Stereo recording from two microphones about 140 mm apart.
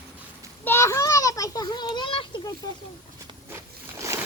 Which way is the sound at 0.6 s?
15° left (ahead or behind).